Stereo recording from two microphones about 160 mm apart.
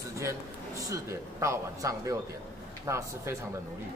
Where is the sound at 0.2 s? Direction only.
20° right (ahead or behind).